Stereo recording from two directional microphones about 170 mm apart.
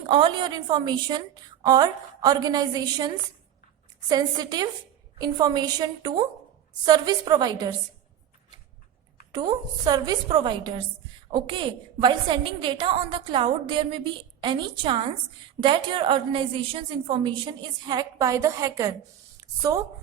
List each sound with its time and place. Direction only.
0.1 s a woman's voice: 30° right (ahead or behind)
4.1 s a woman's voice: 25° right (ahead or behind)
9.3 s a woman's voice: 25° right (ahead or behind)